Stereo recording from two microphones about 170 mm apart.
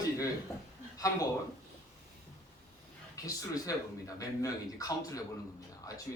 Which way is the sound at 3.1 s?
20° left (ahead or behind).